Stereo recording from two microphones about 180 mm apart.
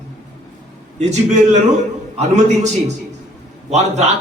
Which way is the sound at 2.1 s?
40° right (ahead or behind).